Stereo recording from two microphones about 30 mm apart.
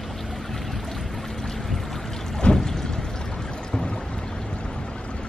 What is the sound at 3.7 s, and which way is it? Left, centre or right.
Boat, left.